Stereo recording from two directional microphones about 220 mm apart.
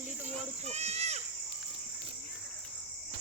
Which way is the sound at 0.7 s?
30° right (ahead or behind).